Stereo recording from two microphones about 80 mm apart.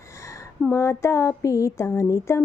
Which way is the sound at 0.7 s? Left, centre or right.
Left.